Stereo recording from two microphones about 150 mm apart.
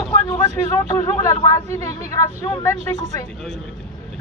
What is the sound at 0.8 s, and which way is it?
Speech, 25° left (ahead or behind).